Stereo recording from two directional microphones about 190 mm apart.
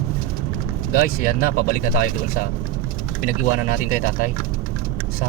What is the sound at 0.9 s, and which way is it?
Speech, 50° left (ahead or behind).